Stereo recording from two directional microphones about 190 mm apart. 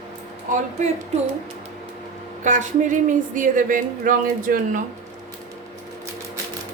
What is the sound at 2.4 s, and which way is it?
Speech, 40° right (ahead or behind).